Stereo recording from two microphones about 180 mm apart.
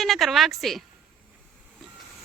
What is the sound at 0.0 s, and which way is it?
Speech, centre (ahead or behind).